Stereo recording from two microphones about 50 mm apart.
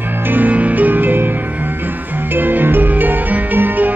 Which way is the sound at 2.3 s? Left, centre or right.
Right.